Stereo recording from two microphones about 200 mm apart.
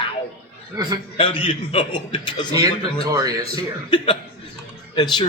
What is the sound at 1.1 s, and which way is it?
A man's voice, 25° left (ahead or behind).